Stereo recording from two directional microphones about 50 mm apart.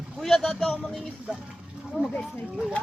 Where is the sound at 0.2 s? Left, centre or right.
Centre.